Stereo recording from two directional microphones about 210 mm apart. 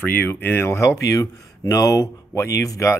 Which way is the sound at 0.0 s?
10° left (ahead or behind).